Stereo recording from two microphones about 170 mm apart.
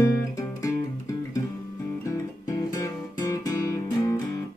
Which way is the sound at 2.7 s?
20° left (ahead or behind).